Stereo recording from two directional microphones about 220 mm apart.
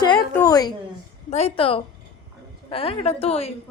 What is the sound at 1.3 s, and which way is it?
A woman's voice, 25° left (ahead or behind).